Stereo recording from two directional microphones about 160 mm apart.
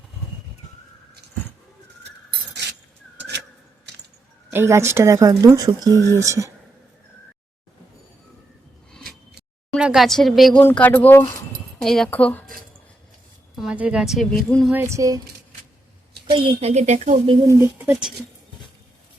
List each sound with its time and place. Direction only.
4.5 s speech: 15° right (ahead or behind)
9.7 s a woman's voice: 5° right (ahead or behind)
10.6 s speech: 10° left (ahead or behind)
13.6 s a woman's voice: 5° right (ahead or behind)
14.7 s speech: 15° right (ahead or behind)
16.3 s a woman's voice: 35° right (ahead or behind)
17.5 s speech: 10° right (ahead or behind)